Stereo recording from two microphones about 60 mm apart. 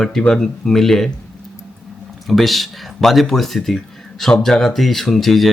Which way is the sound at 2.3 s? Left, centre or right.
Centre.